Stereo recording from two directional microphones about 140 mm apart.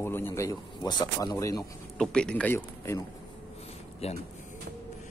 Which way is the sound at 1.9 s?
5° left (ahead or behind).